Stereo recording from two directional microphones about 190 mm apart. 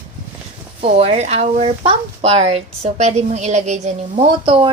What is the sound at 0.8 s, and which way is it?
Speech, 30° right (ahead or behind).